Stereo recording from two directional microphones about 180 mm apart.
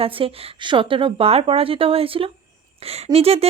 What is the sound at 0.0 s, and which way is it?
Speech, 30° right (ahead or behind).